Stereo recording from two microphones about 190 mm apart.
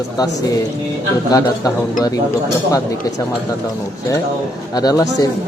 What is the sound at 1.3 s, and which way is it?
Speech, 20° left (ahead or behind).